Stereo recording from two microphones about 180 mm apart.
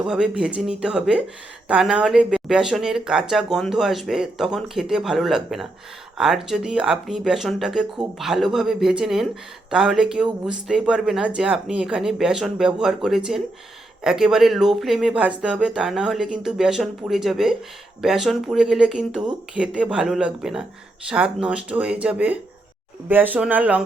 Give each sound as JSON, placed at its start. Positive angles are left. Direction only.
{"t": 0.0, "sound": "speech", "side_deg": -5}